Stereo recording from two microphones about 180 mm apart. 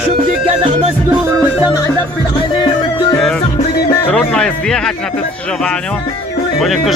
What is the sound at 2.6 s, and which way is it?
Music, 25° left (ahead or behind).